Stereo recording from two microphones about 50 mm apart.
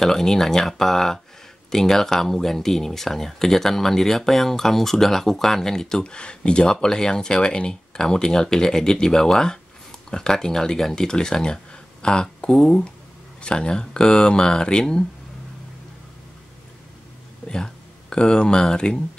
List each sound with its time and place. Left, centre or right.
0.0 s speech: centre
18.1 s speech: centre